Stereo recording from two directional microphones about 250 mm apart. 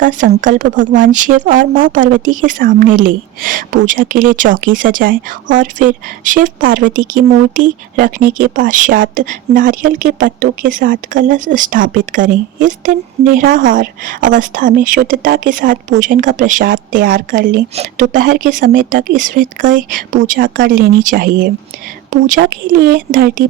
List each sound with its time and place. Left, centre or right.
0.0 s speech: right